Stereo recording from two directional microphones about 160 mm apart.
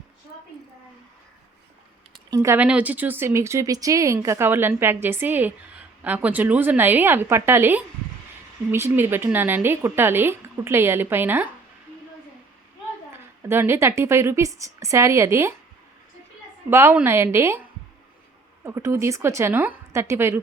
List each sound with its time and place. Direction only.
2.3 s speech: 15° right (ahead or behind)
13.5 s speech: 15° right (ahead or behind)
16.6 s speech: 15° right (ahead or behind)
18.6 s speech: 15° right (ahead or behind)